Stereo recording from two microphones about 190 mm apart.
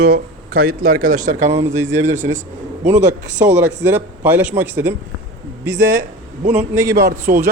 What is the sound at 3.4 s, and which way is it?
Speech, 10° right (ahead or behind).